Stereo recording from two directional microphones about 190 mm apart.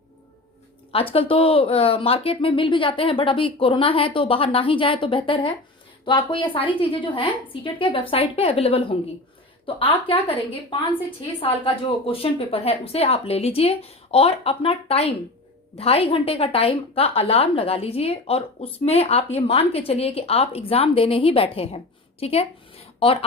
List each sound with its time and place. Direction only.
1.1 s a woman's voice: 30° left (ahead or behind)